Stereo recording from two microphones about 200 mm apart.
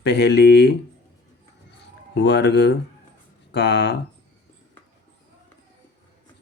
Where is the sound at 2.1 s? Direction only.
55° left (ahead or behind).